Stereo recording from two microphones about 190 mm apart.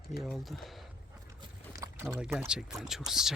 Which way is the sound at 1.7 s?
15° right (ahead or behind).